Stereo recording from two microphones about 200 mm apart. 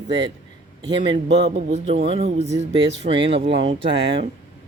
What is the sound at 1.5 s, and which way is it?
Speech, 30° right (ahead or behind).